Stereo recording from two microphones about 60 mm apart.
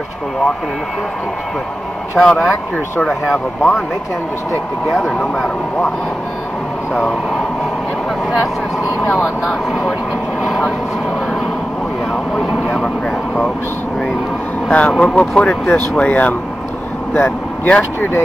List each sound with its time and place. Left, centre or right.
2.1 s speech: centre
4.8 s speech: centre
6.9 s speech: centre
10.4 s vehicle: centre
14.7 s speech: left